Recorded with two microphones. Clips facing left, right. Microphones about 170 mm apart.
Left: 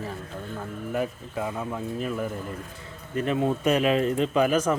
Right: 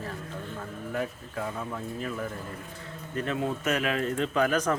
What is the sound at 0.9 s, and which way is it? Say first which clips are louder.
A man's voice: left 4 dB; 15° left (ahead or behind).